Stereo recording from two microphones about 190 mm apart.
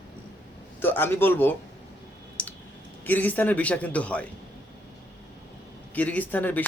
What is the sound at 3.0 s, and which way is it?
A man's voice, 10° left (ahead or behind).